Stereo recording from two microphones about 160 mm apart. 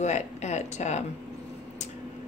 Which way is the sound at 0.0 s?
45° left (ahead or behind).